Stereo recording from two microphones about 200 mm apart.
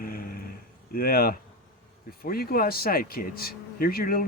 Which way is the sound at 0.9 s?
45° left (ahead or behind).